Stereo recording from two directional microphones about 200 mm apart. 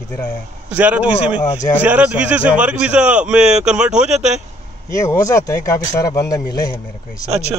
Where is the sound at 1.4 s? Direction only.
20° left (ahead or behind).